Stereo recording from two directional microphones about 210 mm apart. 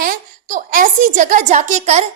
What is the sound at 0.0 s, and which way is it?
A woman's voice, 40° right (ahead or behind).